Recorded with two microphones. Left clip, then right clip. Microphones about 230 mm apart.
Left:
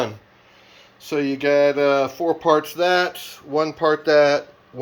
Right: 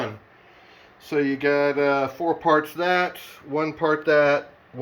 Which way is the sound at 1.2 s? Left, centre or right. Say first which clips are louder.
Left 4 dB; left.